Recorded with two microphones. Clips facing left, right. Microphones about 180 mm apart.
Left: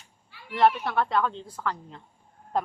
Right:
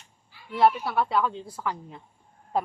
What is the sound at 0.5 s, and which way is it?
A woman's voice, 5° right (ahead or behind).